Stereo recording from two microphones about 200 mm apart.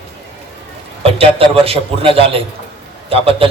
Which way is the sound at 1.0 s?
30° right (ahead or behind).